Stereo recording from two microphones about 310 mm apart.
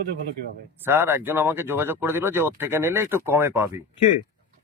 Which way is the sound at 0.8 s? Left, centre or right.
Centre.